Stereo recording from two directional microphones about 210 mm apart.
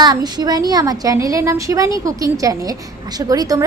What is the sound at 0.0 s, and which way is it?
A woman's voice, 20° right (ahead or behind).